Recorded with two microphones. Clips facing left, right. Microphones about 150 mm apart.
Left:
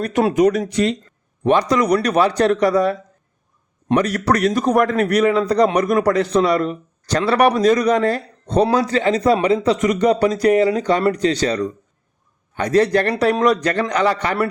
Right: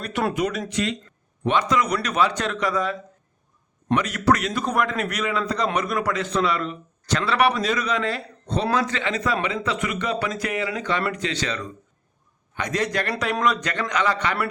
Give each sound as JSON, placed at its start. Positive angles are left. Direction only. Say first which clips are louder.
{"t": 0.0, "sound": "a man's voice", "louder": "left 9 dB", "side_deg": 40}